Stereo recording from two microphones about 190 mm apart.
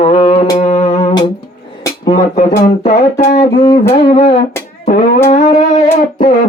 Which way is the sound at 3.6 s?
15° left (ahead or behind).